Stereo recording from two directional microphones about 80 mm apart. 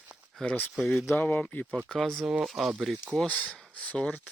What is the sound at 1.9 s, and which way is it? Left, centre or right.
Speech, centre.